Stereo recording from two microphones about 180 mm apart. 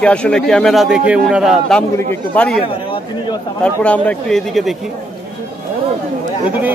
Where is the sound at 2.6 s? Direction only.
30° left (ahead or behind).